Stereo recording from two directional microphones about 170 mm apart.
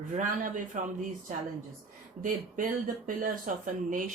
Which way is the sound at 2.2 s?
50° right (ahead or behind).